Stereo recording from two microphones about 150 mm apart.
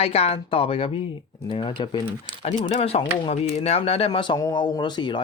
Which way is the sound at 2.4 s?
45° left (ahead or behind).